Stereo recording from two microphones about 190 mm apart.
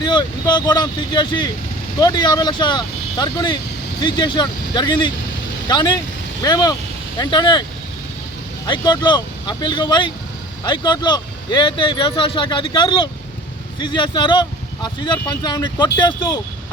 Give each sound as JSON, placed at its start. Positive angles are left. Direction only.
{"t": 0.0, "sound": "speech", "side_deg": 25}
{"t": 8.6, "sound": "speech", "side_deg": 20}